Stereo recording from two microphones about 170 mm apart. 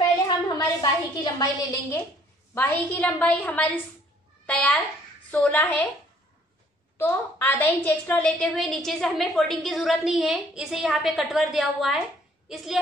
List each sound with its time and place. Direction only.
0.6 s a woman's voice: 25° left (ahead or behind); by 5.9 s 5° left (ahead or behind)
7.0 s a woman's voice: 15° left (ahead or behind); by 12.8 s centre (ahead or behind)